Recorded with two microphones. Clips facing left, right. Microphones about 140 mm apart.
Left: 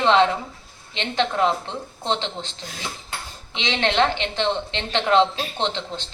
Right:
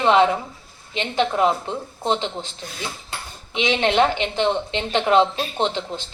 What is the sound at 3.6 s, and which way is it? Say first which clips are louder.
A woman's voice: right 3 dB; 15° right (ahead or behind).